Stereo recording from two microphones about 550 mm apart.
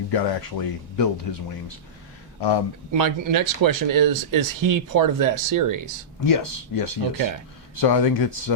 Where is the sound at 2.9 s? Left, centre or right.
Right.